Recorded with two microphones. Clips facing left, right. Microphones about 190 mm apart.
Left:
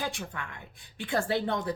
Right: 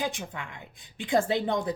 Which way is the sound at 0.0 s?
20° right (ahead or behind).